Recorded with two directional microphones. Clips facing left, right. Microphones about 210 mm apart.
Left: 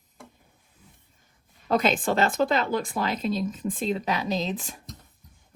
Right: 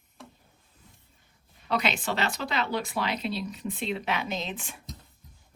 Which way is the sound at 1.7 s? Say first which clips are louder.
Left 6 dB; 50° left (ahead or behind).